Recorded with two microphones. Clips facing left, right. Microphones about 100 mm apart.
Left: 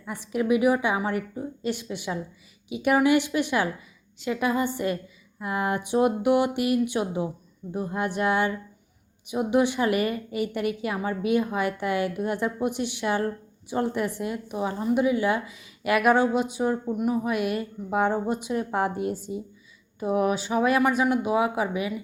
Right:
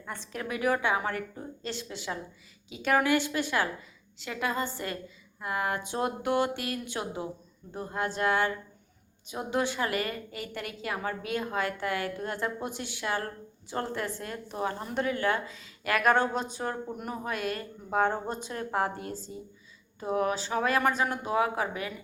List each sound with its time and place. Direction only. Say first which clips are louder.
0.1 s a woman's voice: left 11 dB; 15° left (ahead or behind)